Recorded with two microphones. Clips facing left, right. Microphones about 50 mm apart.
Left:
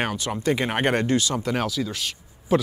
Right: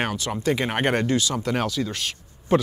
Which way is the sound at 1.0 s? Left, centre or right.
Left.